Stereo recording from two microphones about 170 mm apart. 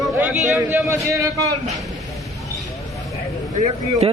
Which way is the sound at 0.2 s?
5° right (ahead or behind).